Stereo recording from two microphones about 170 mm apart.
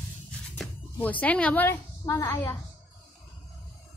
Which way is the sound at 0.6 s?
10° left (ahead or behind).